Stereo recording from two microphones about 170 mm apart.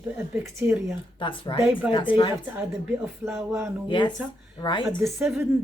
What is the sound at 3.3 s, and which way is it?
Speech, 10° right (ahead or behind).